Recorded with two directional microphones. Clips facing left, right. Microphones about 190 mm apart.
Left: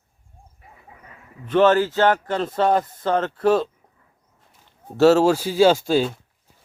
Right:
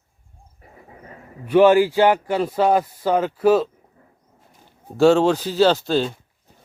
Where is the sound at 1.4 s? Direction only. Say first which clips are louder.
Right 3 dB; 10° right (ahead or behind).